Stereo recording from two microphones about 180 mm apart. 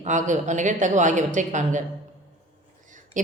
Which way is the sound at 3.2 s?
45° right (ahead or behind).